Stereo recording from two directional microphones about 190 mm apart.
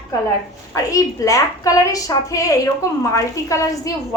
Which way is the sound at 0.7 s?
15° left (ahead or behind).